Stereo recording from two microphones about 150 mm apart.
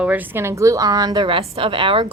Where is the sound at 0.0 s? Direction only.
10° right (ahead or behind).